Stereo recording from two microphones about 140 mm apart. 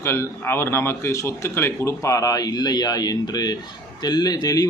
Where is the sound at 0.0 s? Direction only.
20° left (ahead or behind).